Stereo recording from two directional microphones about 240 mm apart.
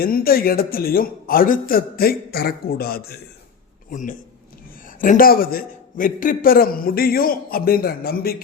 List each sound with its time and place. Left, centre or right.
0.0 s a man's voice: left